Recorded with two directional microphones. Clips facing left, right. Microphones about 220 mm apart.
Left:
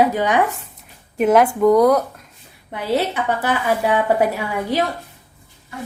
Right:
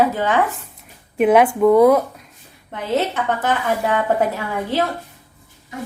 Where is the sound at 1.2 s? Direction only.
Centre (ahead or behind).